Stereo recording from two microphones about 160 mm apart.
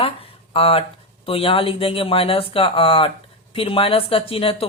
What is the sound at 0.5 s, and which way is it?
Speech, 35° left (ahead or behind).